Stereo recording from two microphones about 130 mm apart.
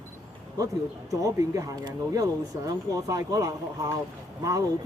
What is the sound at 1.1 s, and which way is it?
Speech, 25° right (ahead or behind).